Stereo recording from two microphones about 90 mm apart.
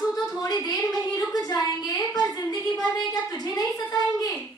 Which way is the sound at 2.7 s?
45° left (ahead or behind).